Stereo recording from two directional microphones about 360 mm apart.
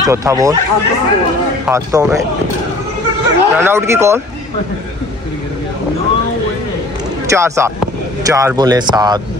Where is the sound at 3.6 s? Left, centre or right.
Centre.